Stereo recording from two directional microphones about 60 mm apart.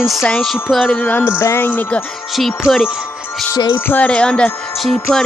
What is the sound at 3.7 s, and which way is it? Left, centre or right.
Music, left.